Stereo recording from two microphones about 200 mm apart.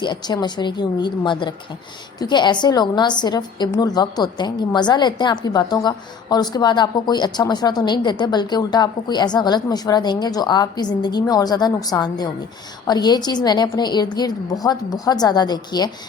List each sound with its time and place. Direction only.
0.0 s a woman's voice: 20° left (ahead or behind)